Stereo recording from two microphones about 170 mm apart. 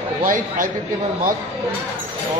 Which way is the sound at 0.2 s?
55° right (ahead or behind).